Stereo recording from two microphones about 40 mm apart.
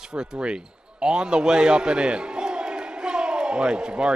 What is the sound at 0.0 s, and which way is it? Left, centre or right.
A man's voice, centre.